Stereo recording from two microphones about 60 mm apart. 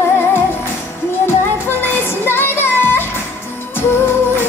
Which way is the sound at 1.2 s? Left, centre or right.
Left.